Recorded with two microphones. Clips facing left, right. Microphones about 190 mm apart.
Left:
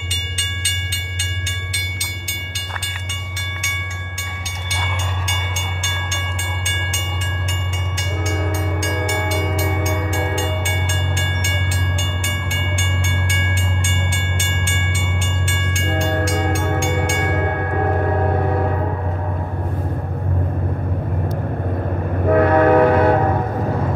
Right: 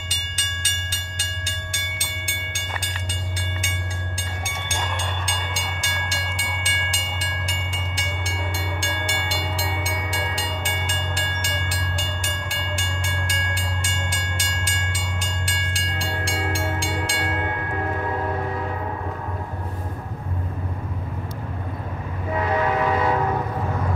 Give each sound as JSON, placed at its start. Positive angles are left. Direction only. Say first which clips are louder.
{"t": 5.9, "sound": "train", "louder": "left 2 dB", "side_deg": -40}
{"t": 10.6, "sound": "train", "louder": "left 4 dB", "side_deg": -40}
{"t": 12.7, "sound": "train", "louder": "left 4 dB", "side_deg": -40}
{"t": 16.8, "sound": "train", "louder": "left 7 dB", "side_deg": -35}
{"t": 17.4, "sound": "music", "louder": "left 6 dB", "side_deg": 55}
{"t": 22.2, "sound": "train", "louder": "left 9 dB", "side_deg": 60}